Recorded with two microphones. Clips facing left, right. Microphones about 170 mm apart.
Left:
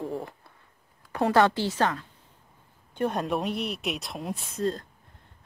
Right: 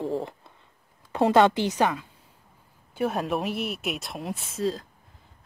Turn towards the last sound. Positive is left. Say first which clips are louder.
# right 1 dB
turn(degrees=0)  # may be behind; listen again after turning